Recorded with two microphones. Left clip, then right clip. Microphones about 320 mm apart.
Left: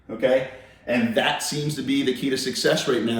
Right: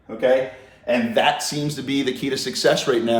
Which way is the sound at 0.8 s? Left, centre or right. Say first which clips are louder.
Right 4 dB; centre.